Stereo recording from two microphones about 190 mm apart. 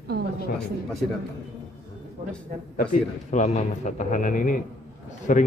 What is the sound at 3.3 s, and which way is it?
A man's voice, 40° left (ahead or behind).